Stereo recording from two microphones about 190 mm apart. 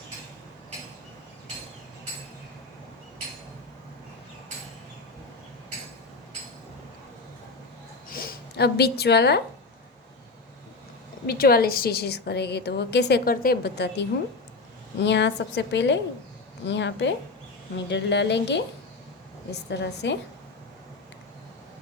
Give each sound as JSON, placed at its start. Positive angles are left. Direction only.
{"t": 8.1, "sound": "speech", "side_deg": 55}
{"t": 11.3, "sound": "a woman's voice", "side_deg": 50}